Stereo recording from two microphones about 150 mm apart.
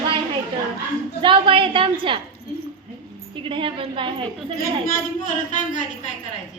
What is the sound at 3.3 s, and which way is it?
A woman's voice, 35° right (ahead or behind).